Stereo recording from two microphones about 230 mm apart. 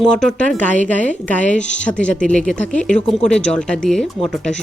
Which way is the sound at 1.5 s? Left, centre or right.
Left.